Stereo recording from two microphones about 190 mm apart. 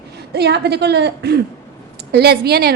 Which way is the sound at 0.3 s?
60° right (ahead or behind).